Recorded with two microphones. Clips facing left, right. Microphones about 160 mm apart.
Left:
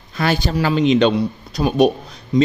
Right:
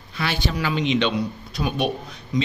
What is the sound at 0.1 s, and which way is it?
A man's voice, 45° left (ahead or behind).